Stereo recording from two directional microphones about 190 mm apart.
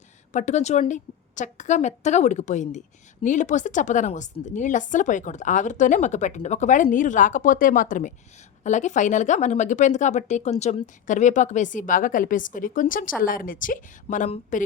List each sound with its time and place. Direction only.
0.3 s speech: 40° left (ahead or behind)